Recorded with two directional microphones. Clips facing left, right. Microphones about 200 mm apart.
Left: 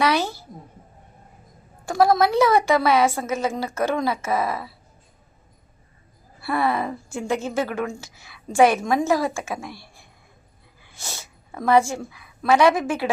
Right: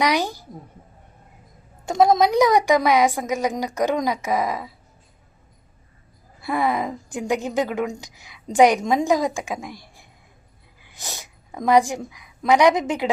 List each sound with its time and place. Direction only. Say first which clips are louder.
0.0 s a child's voice: even; 15° right (ahead or behind)
1.8 s a woman's voice: right 1 dB; 20° right (ahead or behind)
6.4 s a woman's voice: even; 15° right (ahead or behind)